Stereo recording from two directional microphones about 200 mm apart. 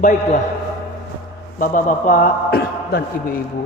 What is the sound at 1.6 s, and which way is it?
A man's voice, 40° left (ahead or behind).